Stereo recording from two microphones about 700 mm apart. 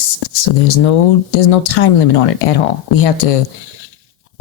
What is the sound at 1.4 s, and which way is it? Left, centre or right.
Speech, left.